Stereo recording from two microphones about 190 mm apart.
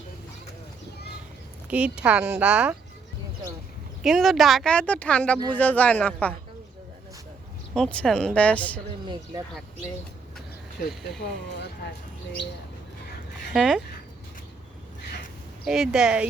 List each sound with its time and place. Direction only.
1.7 s speech: 5° right (ahead or behind)
4.0 s a woman's voice: centre (ahead or behind)
7.7 s speech: 5° left (ahead or behind)
10.8 s speech: 55° left (ahead or behind)
13.5 s speech: centre (ahead or behind)
15.6 s speech: centre (ahead or behind)